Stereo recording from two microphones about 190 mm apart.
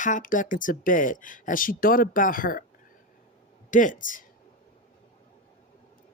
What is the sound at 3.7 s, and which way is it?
Speech, 45° left (ahead or behind).